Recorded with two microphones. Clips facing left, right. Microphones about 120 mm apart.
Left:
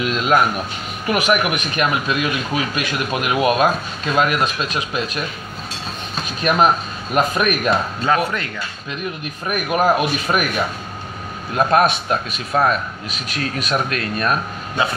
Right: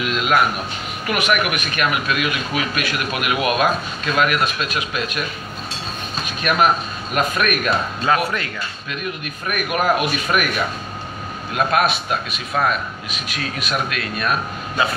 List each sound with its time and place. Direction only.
0.0 s speech: 30° left (ahead or behind)
6.5 s a man's voice: 30° left (ahead or behind)
8.0 s speech: 5° right (ahead or behind)
9.2 s speech: 30° left (ahead or behind)
11.5 s a man's voice: 30° left (ahead or behind)